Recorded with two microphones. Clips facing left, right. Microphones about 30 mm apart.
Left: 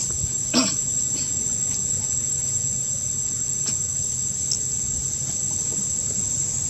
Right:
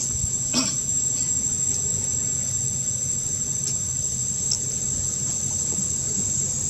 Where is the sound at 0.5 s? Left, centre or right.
Left.